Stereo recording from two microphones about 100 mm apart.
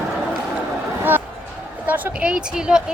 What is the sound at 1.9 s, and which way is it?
Speech, 10° right (ahead or behind).